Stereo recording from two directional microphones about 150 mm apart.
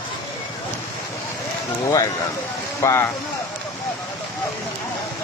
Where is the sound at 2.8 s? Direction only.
20° left (ahead or behind).